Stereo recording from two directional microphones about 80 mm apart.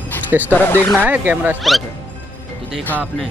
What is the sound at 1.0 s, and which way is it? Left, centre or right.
Speech, right.